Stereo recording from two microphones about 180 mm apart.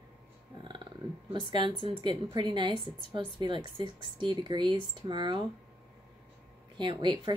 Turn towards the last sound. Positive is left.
turn(degrees=-25)  # may be behind; listen again after turning